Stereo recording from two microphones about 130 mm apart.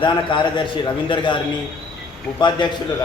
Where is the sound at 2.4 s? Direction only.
35° left (ahead or behind).